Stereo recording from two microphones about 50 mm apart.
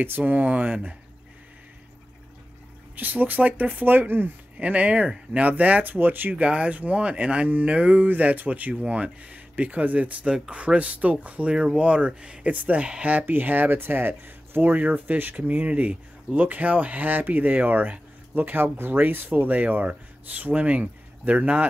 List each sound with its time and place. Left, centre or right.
0.2 s speech: right
3.0 s speech: right
6.3 s speech: right
12.5 s speech: right